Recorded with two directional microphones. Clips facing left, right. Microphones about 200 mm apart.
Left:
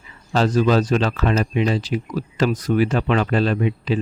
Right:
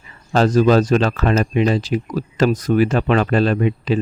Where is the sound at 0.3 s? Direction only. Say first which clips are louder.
Right 4 dB; 45° right (ahead or behind).